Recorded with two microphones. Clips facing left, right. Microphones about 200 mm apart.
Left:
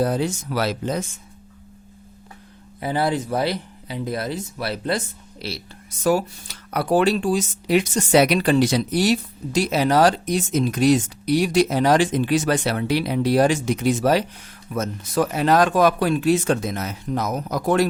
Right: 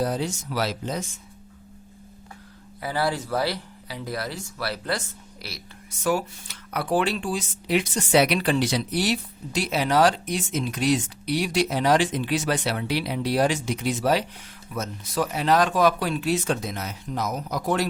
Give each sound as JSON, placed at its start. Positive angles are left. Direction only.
{"t": 0.0, "sound": "speech", "side_deg": 55}
{"t": 2.8, "sound": "speech", "side_deg": 20}